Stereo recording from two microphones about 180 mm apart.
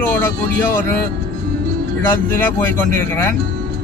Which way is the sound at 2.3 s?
10° left (ahead or behind).